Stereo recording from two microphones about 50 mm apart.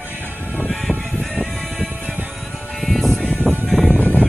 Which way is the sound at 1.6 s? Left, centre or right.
Right.